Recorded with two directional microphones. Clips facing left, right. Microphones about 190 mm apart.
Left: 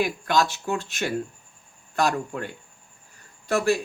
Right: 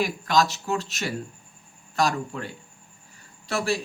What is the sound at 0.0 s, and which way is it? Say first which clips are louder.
Speech: even; 55° left (ahead or behind).